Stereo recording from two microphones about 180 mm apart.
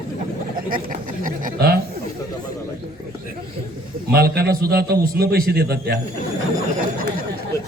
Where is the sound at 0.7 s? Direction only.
50° right (ahead or behind).